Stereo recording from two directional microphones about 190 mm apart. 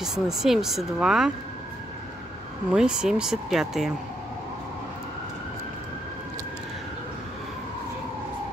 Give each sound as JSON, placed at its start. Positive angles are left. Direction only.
{"t": 0.0, "sound": "speech", "side_deg": 0}
{"t": 2.7, "sound": "speech", "side_deg": -5}